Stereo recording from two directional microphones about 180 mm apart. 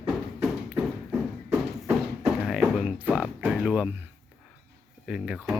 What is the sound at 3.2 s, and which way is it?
Music, centre (ahead or behind).